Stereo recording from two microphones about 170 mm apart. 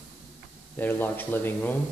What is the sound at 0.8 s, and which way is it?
Speech, 10° left (ahead or behind).